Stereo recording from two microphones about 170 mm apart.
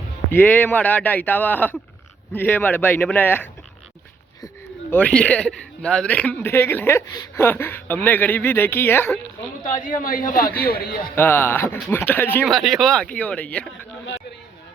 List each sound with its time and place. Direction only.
0.3 s speech: 10° left (ahead or behind)
4.9 s speech: 10° left (ahead or behind)
9.8 s a man's voice: 50° left (ahead or behind)
10.7 s speech: 65° left (ahead or behind)
11.1 s speech: 15° left (ahead or behind)
12.5 s speech: centre (ahead or behind)